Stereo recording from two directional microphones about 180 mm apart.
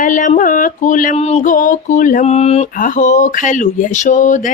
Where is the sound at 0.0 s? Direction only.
45° left (ahead or behind).